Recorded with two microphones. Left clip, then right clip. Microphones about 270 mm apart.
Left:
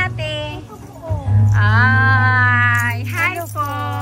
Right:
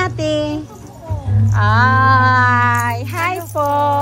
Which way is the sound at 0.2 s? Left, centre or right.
Centre.